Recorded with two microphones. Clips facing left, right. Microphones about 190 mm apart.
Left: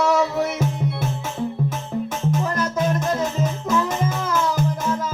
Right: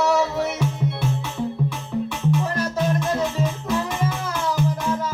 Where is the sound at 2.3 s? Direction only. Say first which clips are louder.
Even; 45° left (ahead or behind).